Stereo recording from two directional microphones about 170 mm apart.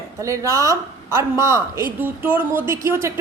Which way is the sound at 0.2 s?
20° right (ahead or behind).